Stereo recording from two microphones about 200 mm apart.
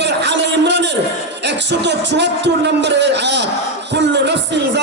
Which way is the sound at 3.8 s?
60° right (ahead or behind).